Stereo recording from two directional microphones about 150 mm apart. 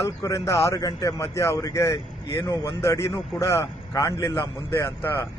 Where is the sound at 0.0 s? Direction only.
20° left (ahead or behind).